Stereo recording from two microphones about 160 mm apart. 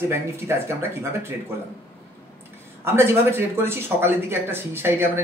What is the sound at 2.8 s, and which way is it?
Speech, 15° right (ahead or behind).